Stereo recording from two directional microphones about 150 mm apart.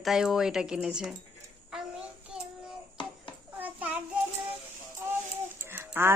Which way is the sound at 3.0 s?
30° left (ahead or behind).